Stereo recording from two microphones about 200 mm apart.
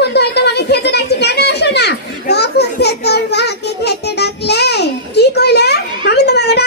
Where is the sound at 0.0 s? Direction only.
55° left (ahead or behind).